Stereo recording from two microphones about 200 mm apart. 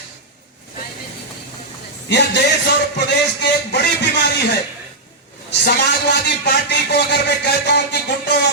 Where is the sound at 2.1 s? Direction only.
60° left (ahead or behind).